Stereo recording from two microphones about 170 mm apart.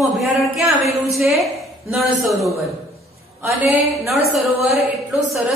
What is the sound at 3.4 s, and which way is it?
A woman's voice, 10° right (ahead or behind).